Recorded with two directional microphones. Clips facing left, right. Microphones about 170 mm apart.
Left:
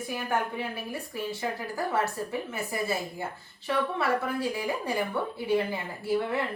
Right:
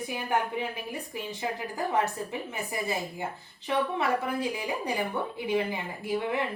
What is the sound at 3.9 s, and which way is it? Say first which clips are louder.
A woman's voice: even; 15° right (ahead or behind).